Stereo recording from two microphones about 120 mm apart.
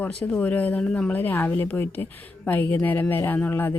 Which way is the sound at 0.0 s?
10° left (ahead or behind).